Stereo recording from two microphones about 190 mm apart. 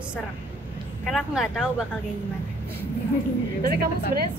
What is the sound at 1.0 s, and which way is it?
Speech, centre (ahead or behind).